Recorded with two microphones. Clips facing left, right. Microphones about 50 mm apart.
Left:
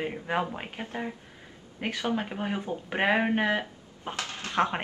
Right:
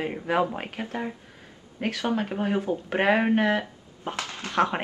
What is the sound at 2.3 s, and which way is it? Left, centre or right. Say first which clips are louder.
Speech: right 6 dB; centre.